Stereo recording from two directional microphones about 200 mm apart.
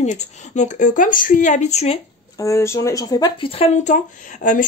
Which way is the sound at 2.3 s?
15° left (ahead or behind).